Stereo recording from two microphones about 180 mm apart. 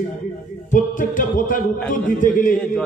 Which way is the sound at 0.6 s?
45° left (ahead or behind).